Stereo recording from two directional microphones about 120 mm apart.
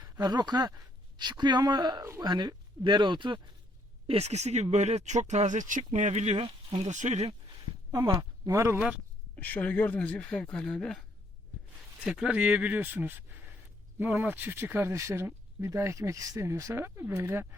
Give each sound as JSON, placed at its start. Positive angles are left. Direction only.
{"t": 0.0, "sound": "speech", "side_deg": -35}
{"t": 4.0, "sound": "speech", "side_deg": -60}
{"t": 6.4, "sound": "speech", "side_deg": -50}
{"t": 6.8, "sound": "speech", "side_deg": -85}
{"t": 7.9, "sound": "speech", "side_deg": -30}
{"t": 9.3, "sound": "speech", "side_deg": 15}
{"t": 12.0, "sound": "speech", "side_deg": -5}